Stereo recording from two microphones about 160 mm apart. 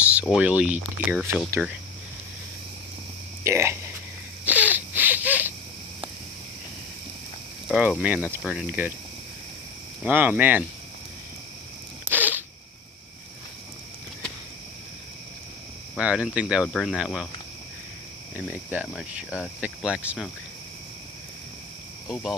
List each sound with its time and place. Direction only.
0.0 s speech: 10° right (ahead or behind)
3.4 s a sound: 15° right (ahead or behind)
7.7 s speech: 10° right (ahead or behind)
10.0 s speech: 10° right (ahead or behind)
12.0 s a sound: 10° right (ahead or behind)
16.0 s speech: 5° right (ahead or behind)
18.3 s speech: 5° right (ahead or behind)
22.1 s speech: centre (ahead or behind)